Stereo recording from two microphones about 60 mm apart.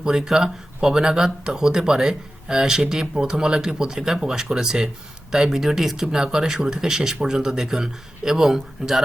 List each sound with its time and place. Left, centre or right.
0.0 s speech: centre